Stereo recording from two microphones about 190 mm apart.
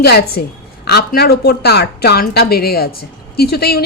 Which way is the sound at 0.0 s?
55° left (ahead or behind).